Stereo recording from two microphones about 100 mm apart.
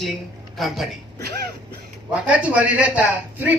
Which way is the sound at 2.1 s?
15° right (ahead or behind).